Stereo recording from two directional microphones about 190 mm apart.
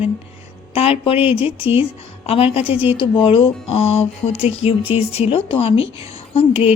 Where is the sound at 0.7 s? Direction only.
30° left (ahead or behind).